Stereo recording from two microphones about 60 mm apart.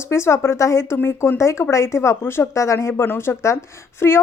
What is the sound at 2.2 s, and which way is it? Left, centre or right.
Speech, left.